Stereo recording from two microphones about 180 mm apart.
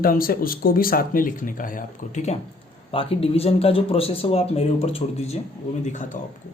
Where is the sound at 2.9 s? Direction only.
30° left (ahead or behind).